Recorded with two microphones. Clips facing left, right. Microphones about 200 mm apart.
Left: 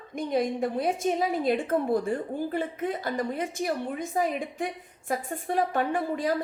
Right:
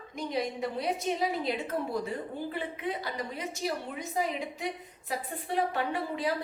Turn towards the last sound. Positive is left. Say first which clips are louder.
# left 4 dB
turn(degrees=45)  # may be behind; listen again after turning